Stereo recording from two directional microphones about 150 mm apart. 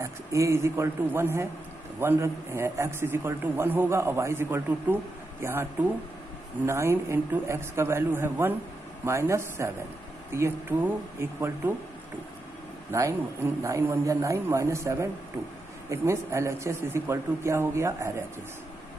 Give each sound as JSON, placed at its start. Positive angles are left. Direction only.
{"t": 0.0, "sound": "a man's voice", "side_deg": -20}
{"t": 12.9, "sound": "a man's voice", "side_deg": -20}